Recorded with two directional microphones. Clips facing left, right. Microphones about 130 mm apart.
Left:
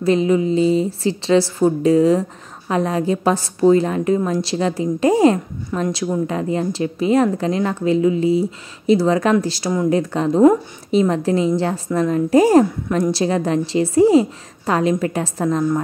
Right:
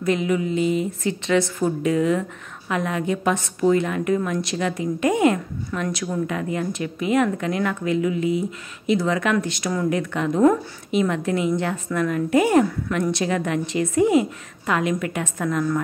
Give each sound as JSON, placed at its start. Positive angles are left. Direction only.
{"t": 0.0, "sound": "speech", "side_deg": 30}